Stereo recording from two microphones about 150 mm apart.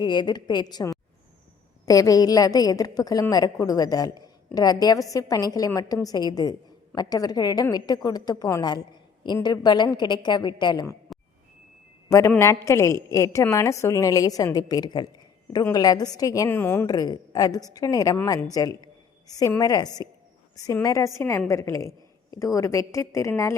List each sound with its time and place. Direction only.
0.0 s a woman's voice: 30° left (ahead or behind)
12.0 s a man's voice: 20° left (ahead or behind)
16.8 s a woman's voice: 25° left (ahead or behind)